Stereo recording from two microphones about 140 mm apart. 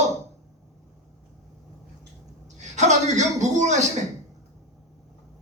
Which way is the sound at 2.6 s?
55° right (ahead or behind).